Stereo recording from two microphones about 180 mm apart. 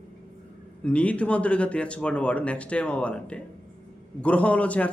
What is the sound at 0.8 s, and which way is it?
Speech, 5° left (ahead or behind).